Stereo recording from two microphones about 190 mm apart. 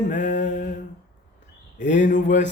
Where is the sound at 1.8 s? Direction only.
40° left (ahead or behind).